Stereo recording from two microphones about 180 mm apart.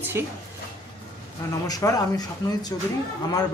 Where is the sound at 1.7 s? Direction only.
20° left (ahead or behind).